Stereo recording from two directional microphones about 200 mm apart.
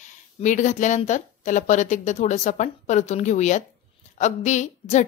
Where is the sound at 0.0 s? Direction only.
35° left (ahead or behind).